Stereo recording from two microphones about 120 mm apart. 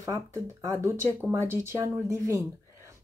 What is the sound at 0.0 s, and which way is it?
Speech, 25° right (ahead or behind).